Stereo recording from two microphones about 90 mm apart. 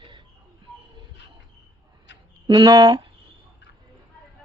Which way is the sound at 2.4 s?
55° right (ahead or behind).